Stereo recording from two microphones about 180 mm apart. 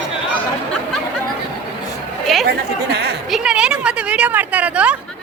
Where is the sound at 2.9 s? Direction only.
65° right (ahead or behind).